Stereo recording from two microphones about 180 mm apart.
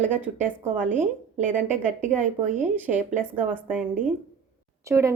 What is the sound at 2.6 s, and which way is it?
A woman's voice, 10° right (ahead or behind).